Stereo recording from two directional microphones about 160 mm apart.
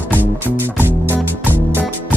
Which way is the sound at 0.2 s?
15° right (ahead or behind).